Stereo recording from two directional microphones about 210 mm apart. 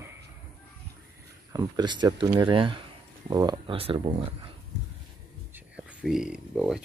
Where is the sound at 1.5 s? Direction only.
20° right (ahead or behind).